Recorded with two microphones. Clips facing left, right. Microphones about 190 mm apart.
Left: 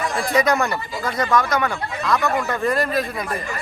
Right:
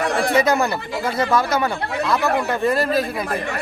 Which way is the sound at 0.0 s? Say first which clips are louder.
Right 4 dB; 65° right (ahead or behind).